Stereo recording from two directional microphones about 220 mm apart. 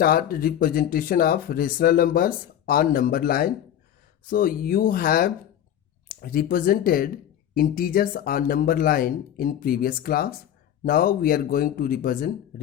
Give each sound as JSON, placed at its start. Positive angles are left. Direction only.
{"t": 0.0, "sound": "speech", "side_deg": 40}